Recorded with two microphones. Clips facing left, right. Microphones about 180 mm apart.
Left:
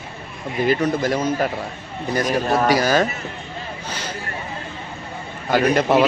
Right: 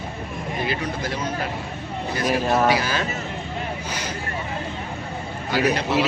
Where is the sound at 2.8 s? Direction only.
45° left (ahead or behind).